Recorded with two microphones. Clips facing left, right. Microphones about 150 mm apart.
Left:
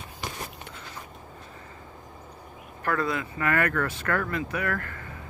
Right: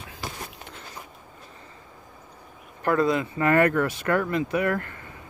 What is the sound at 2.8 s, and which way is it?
Speech, 20° right (ahead or behind).